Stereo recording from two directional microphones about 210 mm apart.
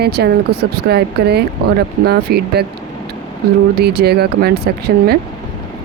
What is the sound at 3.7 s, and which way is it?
Speech, 50° right (ahead or behind).